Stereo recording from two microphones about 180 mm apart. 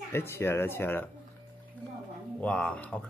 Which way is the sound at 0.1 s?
15° left (ahead or behind).